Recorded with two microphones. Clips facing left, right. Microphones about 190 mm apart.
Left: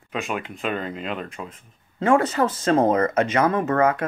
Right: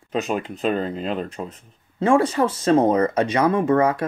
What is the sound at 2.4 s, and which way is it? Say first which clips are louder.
Speech: right 2 dB; 10° right (ahead or behind).